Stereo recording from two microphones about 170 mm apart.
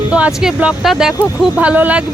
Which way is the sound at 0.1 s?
5° right (ahead or behind).